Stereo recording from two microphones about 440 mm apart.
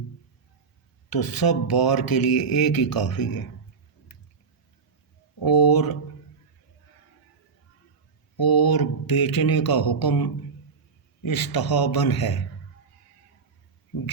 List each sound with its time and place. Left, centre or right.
1.1 s speech: left
5.4 s speech: left
8.4 s speech: left